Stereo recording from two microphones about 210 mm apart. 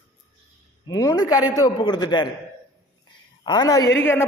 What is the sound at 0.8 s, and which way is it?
A man's voice, 15° left (ahead or behind).